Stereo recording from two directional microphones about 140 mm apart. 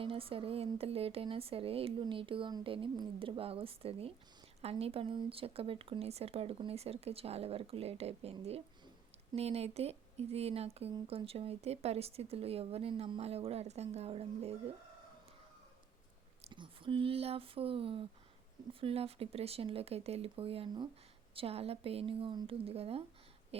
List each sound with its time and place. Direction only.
0.0 s speech: 40° right (ahead or behind)
16.5 s a sound: 35° right (ahead or behind)
18.7 s speech: 40° right (ahead or behind)